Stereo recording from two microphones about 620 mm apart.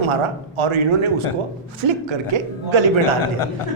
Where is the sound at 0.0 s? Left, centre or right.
Right.